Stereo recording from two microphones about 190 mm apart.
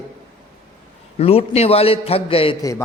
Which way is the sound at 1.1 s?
30° left (ahead or behind).